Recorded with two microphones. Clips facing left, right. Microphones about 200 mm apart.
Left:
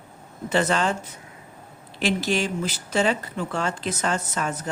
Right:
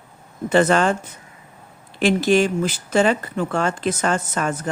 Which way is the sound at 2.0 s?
50° right (ahead or behind).